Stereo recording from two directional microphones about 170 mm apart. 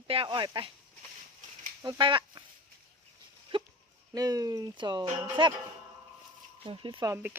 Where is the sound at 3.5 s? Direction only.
30° right (ahead or behind).